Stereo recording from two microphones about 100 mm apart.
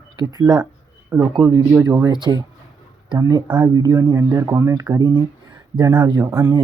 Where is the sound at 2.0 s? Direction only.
45° right (ahead or behind).